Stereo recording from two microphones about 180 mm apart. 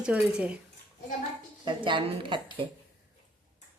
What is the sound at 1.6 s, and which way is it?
Speech, 25° right (ahead or behind).